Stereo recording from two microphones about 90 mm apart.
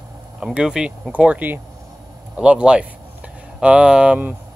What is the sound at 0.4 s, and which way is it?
Speech, 10° right (ahead or behind).